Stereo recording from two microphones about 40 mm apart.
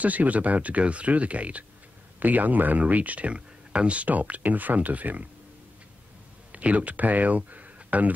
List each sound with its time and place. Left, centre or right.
0.0 s speech: right
2.1 s speech: right
6.5 s speech: right